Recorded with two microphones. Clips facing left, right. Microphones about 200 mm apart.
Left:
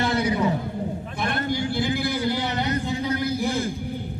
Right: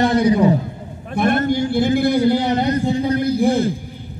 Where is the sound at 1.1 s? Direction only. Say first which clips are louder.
Right 11 dB; 55° right (ahead or behind).